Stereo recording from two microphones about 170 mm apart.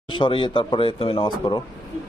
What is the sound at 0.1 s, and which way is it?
Speech, 30° left (ahead or behind).